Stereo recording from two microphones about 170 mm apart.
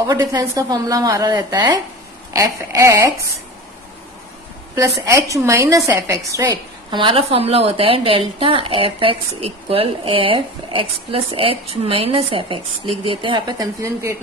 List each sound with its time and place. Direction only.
0.0 s a woman's voice: 20° right (ahead or behind)
5.0 s a woman's voice: 15° right (ahead or behind)